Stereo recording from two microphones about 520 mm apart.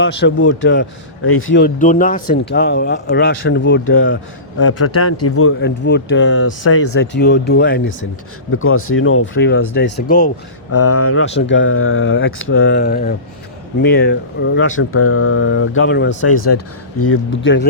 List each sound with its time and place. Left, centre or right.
0.0 s a man's voice: left
10.7 s a man's voice: left